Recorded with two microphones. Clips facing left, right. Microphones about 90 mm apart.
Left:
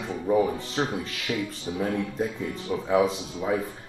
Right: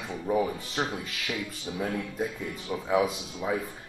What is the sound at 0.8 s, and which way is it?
Speech, 25° left (ahead or behind).